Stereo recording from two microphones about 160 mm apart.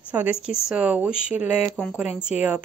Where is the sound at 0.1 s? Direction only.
10° right (ahead or behind).